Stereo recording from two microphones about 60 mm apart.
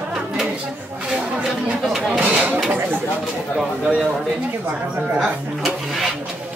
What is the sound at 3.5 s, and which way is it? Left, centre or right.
Speech, centre.